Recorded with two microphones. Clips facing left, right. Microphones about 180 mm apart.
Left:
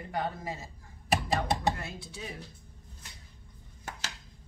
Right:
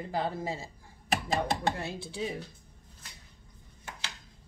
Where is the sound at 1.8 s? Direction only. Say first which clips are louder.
Right 6 dB; 30° right (ahead or behind).